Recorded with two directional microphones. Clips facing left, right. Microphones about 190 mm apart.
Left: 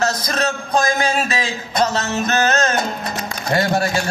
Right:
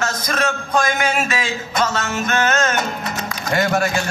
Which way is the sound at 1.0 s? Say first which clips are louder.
Left 1 dB; 30° left (ahead or behind).